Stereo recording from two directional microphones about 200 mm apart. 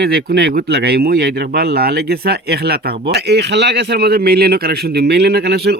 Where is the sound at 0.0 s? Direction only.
50° right (ahead or behind).